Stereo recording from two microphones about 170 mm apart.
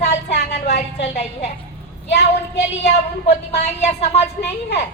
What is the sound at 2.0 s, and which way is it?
Speech, 80° left.